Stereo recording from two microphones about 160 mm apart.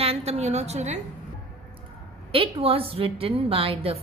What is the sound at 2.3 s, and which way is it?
Speech, 35° right (ahead or behind).